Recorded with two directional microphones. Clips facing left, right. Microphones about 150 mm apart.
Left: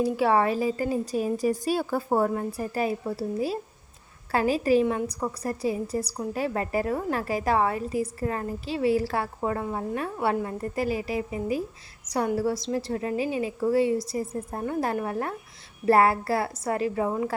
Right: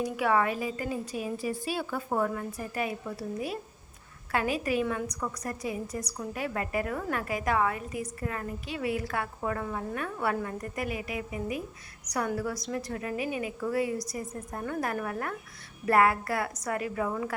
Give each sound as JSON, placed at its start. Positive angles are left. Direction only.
{"t": 0.0, "sound": "a woman's voice", "side_deg": 30}